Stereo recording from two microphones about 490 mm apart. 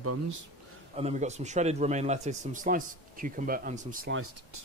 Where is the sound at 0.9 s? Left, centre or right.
Centre.